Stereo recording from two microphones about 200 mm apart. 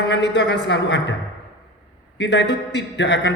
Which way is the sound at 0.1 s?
60° left (ahead or behind).